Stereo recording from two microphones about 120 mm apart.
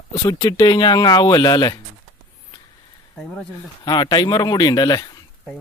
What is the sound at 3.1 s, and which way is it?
Speech, 10° left (ahead or behind).